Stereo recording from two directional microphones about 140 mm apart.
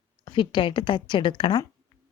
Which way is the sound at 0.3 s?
35° left (ahead or behind).